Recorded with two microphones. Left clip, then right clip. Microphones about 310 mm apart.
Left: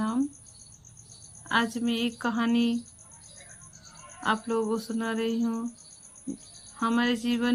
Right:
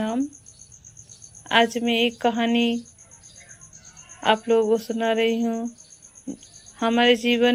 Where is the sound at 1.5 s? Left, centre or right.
Centre.